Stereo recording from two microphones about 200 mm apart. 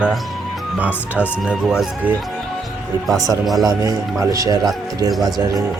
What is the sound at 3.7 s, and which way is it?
Speech, 15° right (ahead or behind).